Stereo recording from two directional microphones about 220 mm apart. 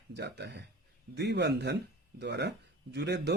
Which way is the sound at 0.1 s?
50° right (ahead or behind).